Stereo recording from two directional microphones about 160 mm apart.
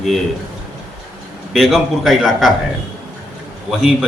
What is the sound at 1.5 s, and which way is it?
A man's voice, centre (ahead or behind).